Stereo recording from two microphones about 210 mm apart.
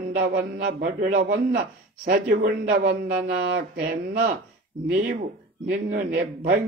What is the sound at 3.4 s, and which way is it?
Speech, 55° right (ahead or behind).